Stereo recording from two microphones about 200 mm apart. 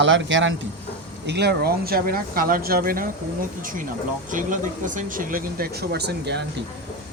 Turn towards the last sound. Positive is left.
turn(degrees=-55)  # may be behind; listen again after turning